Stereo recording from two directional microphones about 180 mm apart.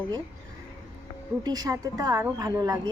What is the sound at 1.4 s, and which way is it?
Speech, 20° right (ahead or behind).